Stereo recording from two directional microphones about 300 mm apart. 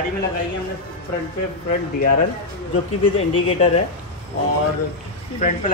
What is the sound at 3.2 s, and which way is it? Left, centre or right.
Speech, centre.